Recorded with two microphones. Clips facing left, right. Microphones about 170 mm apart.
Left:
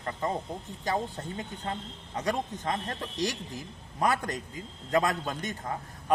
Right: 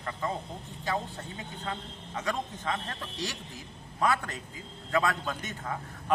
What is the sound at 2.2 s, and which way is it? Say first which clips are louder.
Speech: left 3 dB; 40° left (ahead or behind).